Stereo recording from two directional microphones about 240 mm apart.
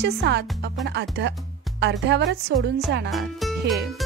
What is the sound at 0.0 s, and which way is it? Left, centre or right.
Music, right.